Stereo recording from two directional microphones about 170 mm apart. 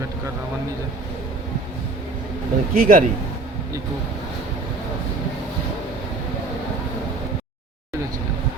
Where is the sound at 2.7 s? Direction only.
55° right (ahead or behind).